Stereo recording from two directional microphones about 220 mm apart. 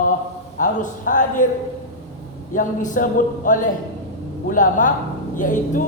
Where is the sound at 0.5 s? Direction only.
35° left (ahead or behind).